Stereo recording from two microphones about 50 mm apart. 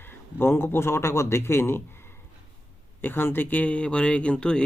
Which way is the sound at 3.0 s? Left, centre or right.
Left.